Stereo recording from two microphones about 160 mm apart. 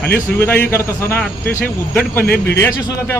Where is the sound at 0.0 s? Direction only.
10° left (ahead or behind).